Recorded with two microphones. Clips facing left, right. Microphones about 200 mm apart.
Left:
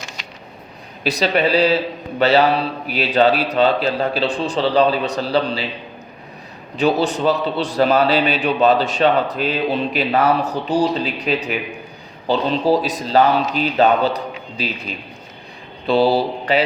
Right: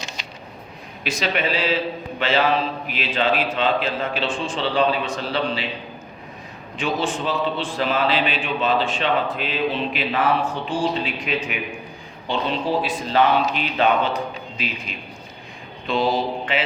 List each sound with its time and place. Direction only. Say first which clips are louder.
1.0 s a man's voice: left 6 dB; 35° left (ahead or behind)
7.0 s a man's voice: left 5 dB; 40° left (ahead or behind)
15.9 s a man's voice: left 6 dB; 35° left (ahead or behind)